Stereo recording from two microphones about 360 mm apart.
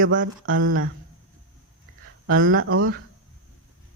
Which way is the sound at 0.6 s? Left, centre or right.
Right.